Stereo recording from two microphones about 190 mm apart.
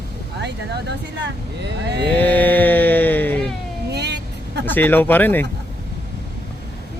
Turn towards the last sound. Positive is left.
turn(degrees=10)  # may be behind; listen again after turning